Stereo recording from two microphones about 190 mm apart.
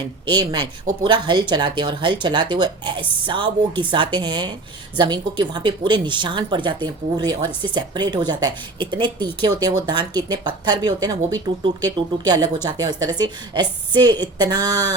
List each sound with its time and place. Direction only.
0.0 s a woman's voice: 20° right (ahead or behind)